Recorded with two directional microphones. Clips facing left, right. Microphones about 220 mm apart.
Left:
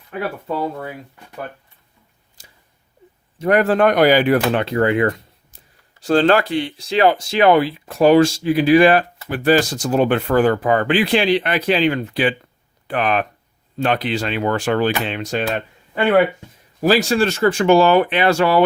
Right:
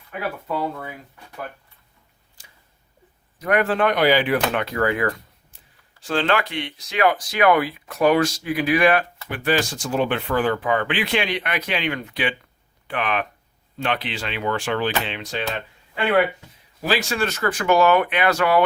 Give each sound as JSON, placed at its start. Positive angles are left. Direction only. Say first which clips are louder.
{"t": 2.4, "sound": "scissors", "louder": "left 4 dB", "side_deg": 40}
{"t": 3.3, "sound": "speech", "louder": "left 5 dB", "side_deg": 30}
{"t": 4.6, "sound": "speech", "louder": "left 5 dB", "side_deg": 25}
{"t": 5.5, "sound": "speech", "louder": "left 4 dB", "side_deg": 40}
{"t": 16.8, "sound": "speech", "louder": "left 7 dB", "side_deg": 40}